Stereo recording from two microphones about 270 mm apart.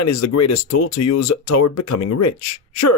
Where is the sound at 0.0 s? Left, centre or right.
Left.